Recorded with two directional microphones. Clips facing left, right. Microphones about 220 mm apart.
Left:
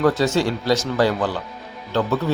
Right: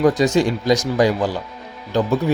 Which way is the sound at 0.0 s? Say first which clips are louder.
Right 3 dB; 15° right (ahead or behind).